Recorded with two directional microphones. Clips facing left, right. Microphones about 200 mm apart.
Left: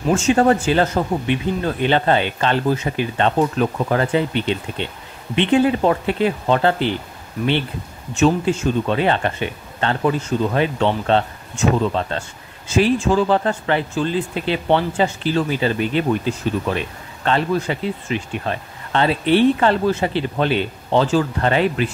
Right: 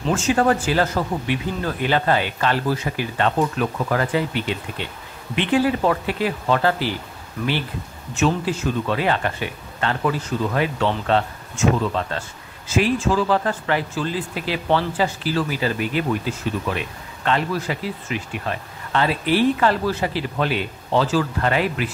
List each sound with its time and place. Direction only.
0.1 s speech: 25° left (ahead or behind)
8.2 s speech: 25° left (ahead or behind)